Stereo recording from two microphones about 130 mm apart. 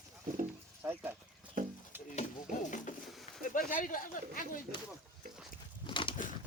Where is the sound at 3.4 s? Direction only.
90° left.